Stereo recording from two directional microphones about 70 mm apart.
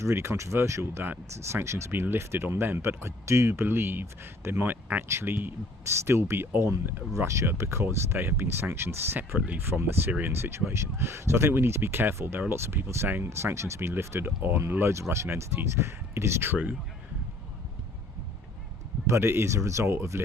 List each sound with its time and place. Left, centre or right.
0.0 s speech: right
5.8 s speech: right
9.5 s speech: right
10.4 s speech: right
19.0 s speech: right